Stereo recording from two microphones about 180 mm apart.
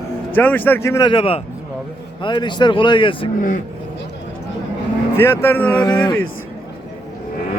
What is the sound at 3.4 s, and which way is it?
Speech, 45° left (ahead or behind).